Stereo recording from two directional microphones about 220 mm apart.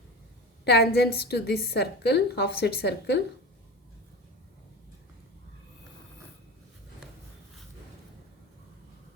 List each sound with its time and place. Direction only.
0.6 s a woman's voice: 50° left (ahead or behind)